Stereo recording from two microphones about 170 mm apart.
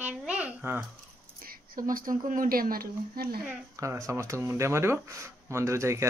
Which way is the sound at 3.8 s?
20° right (ahead or behind).